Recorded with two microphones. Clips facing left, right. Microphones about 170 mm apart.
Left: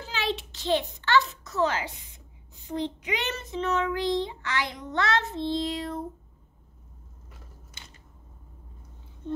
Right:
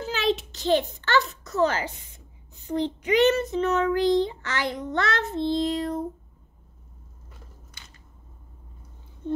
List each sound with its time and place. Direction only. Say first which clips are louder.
0.0 s a child's voice: right 6 dB; 45° right (ahead or behind)